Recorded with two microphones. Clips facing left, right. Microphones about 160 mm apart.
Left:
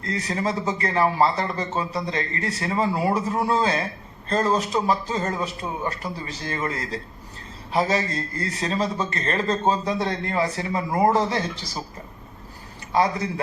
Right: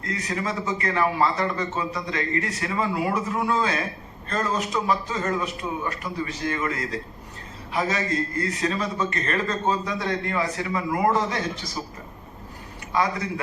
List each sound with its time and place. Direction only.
0.0 s a man's voice: 30° left (ahead or behind)
12.9 s a man's voice: 30° left (ahead or behind)